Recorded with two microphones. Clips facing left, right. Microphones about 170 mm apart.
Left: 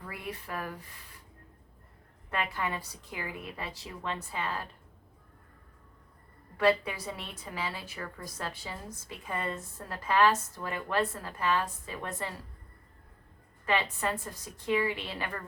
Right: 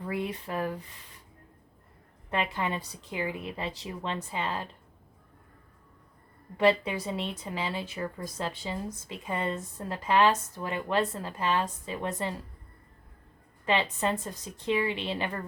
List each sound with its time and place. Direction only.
0.0 s a woman's voice: 25° right (ahead or behind)
2.3 s a woman's voice: 20° right (ahead or behind)
6.6 s a woman's voice: 20° right (ahead or behind)
13.7 s a woman's voice: 20° right (ahead or behind)